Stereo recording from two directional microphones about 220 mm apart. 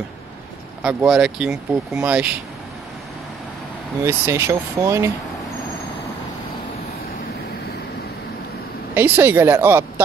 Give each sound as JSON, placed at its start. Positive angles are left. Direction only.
{"t": 0.8, "sound": "speech", "side_deg": -5}
{"t": 4.0, "sound": "speech", "side_deg": -10}
{"t": 8.9, "sound": "speech", "side_deg": -10}